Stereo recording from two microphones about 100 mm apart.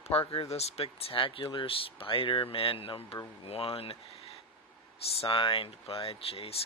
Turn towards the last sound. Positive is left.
turn(degrees=75)  # may be behind; listen again after turning